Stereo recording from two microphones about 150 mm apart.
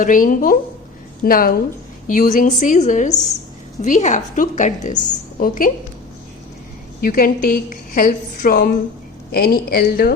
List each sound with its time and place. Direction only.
0.0 s a woman's voice: 65° left (ahead or behind)
1.2 s a woman's voice: 75° left (ahead or behind)
2.0 s a woman's voice: 60° left (ahead or behind)
7.0 s a woman's voice: 70° left (ahead or behind); by 10.2 s 90° left